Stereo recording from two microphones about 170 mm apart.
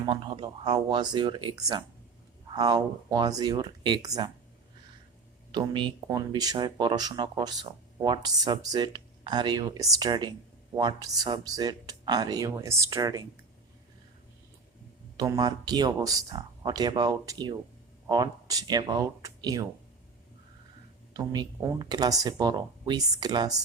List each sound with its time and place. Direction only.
0.0 s speech: 30° right (ahead or behind)
5.5 s speech: 25° right (ahead or behind)
15.2 s speech: 25° right (ahead or behind)
21.1 s speech: 25° right (ahead or behind)